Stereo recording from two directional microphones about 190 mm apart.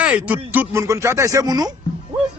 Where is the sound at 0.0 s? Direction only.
5° right (ahead or behind).